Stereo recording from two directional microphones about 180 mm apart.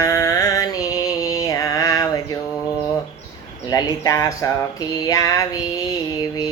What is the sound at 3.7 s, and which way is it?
Female singing, 20° left (ahead or behind).